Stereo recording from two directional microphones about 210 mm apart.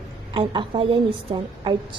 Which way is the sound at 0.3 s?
25° right (ahead or behind).